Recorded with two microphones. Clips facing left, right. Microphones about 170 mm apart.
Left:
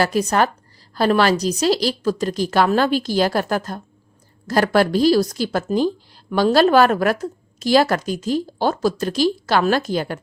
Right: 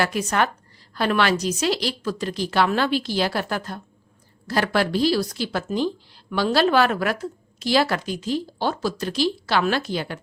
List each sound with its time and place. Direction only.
0.0 s a woman's voice: 35° left (ahead or behind)